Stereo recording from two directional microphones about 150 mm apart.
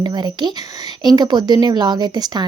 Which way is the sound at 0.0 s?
30° right (ahead or behind).